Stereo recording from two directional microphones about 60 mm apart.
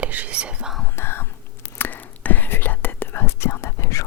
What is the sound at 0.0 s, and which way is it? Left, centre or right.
Whispering, right.